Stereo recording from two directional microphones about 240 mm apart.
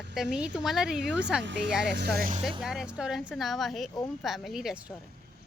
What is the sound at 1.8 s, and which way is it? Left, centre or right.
Speech, right.